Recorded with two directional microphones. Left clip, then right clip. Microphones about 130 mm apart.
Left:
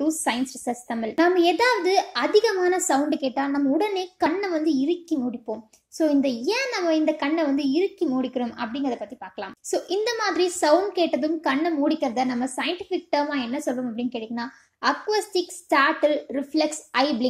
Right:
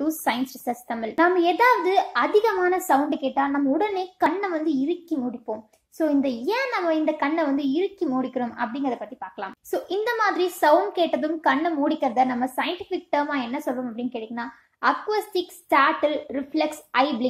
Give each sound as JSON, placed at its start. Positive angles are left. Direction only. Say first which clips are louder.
{"t": 0.0, "sound": "speech", "louder": "even", "side_deg": 20}
{"t": 1.1, "sound": "a child's voice", "louder": "even", "side_deg": 40}